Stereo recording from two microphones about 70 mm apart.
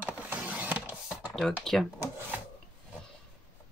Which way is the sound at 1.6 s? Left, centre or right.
Centre.